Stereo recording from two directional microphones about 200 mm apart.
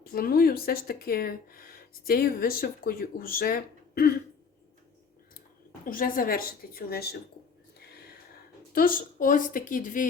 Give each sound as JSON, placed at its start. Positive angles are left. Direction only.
{"t": 0.0, "sound": "speech", "side_deg": 50}
{"t": 5.8, "sound": "speech", "side_deg": 45}
{"t": 7.8, "sound": "a sound", "side_deg": 55}
{"t": 8.7, "sound": "speech", "side_deg": 45}